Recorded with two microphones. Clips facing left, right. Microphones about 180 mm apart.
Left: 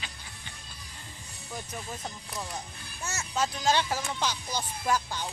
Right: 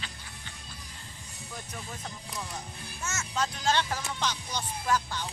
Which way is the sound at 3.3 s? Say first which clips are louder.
Left 2 dB; 5° left (ahead or behind).